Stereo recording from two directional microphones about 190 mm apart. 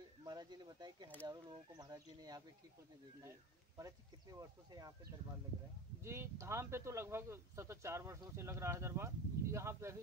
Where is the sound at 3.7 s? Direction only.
20° right (ahead or behind).